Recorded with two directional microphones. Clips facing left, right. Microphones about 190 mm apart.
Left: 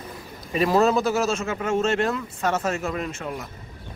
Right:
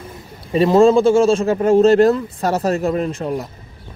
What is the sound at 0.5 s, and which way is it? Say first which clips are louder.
Speech: right 8 dB; 30° right (ahead or behind).